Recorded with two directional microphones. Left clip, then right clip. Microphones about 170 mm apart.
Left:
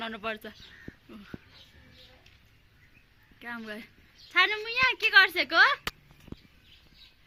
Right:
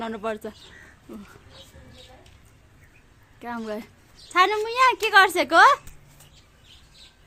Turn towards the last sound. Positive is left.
turn(degrees=-20)  # may be behind; listen again after turning